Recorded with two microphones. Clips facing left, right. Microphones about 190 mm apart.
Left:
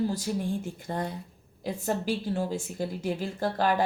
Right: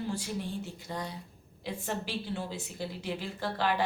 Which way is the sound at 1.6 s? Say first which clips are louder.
Left 6 dB; 40° left (ahead or behind).